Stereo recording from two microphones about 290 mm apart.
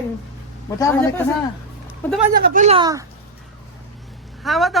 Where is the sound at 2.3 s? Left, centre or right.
Right.